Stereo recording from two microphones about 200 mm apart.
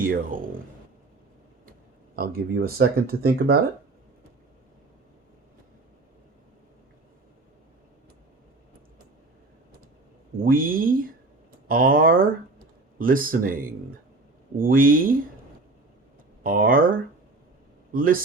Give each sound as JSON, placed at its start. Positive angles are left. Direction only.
{"t": 0.0, "sound": "speech", "side_deg": -45}
{"t": 2.1, "sound": "speech", "side_deg": -50}
{"t": 10.4, "sound": "speech", "side_deg": -45}
{"t": 16.4, "sound": "speech", "side_deg": -45}
{"t": 17.9, "sound": "a man's voice", "side_deg": -45}